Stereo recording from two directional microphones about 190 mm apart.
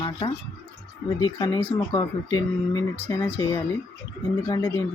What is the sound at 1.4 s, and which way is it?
Speech, 10° left (ahead or behind).